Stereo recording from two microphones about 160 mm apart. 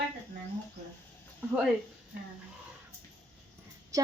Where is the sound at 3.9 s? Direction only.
20° right (ahead or behind).